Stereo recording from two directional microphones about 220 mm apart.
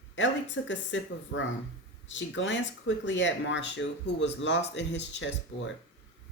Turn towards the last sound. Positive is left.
turn(degrees=55)  # may be behind; listen again after turning